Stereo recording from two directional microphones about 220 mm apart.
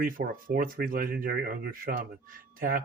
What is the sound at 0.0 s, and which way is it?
Speech, 40° right (ahead or behind).